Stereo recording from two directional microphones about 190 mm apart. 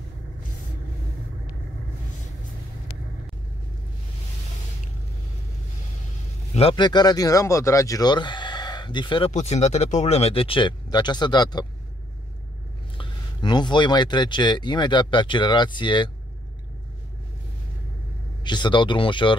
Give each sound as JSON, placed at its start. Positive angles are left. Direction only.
{"t": 6.5, "sound": "speech", "side_deg": 25}
{"t": 12.9, "sound": "speech", "side_deg": 25}
{"t": 18.4, "sound": "speech", "side_deg": 25}